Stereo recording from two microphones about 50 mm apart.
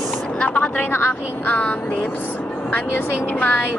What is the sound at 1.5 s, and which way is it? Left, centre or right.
Speech, left.